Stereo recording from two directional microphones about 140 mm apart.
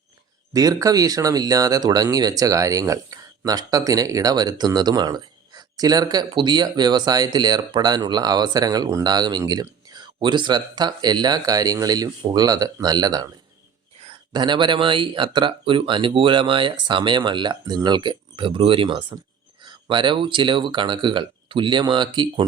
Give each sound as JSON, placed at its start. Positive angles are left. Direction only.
{"t": 0.5, "sound": "speech", "side_deg": -25}